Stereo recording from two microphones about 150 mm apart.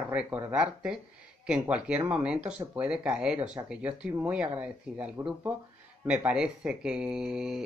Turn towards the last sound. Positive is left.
turn(degrees=-5)  # may be behind; listen again after turning